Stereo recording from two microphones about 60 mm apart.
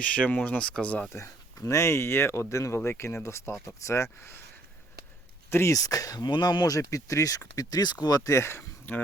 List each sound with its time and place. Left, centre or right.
0.0 s speech: left
1.1 s speech: left
5.5 s speech: left
5.7 s speech: left
8.3 s speech: left
8.9 s speech: left